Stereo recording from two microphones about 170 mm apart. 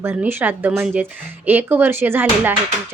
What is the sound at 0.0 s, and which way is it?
Speech, 15° right (ahead or behind).